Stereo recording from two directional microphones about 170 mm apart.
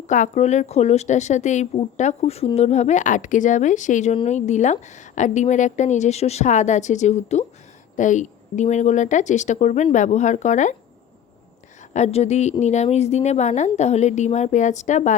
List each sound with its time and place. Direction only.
0.1 s speech: 45° left (ahead or behind)
11.9 s a woman's voice: 40° left (ahead or behind)